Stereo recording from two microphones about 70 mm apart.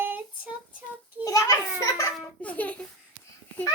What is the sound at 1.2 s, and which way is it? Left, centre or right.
Children playing, left.